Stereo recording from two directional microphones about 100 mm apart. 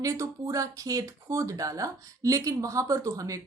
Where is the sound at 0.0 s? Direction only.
35° right (ahead or behind).